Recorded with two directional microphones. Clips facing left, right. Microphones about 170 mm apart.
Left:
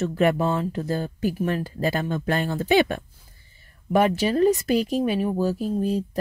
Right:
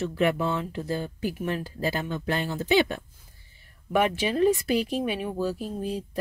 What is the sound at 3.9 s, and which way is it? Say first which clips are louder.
A woman's voice: left 4 dB; 40° left (ahead or behind).